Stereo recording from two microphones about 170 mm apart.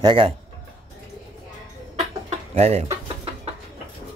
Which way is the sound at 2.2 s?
40° right (ahead or behind).